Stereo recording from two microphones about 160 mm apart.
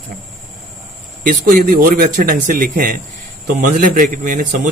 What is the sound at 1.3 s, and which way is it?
Speech, 60° right (ahead or behind).